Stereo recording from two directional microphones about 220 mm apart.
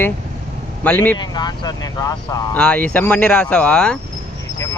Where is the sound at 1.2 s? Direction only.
20° left (ahead or behind).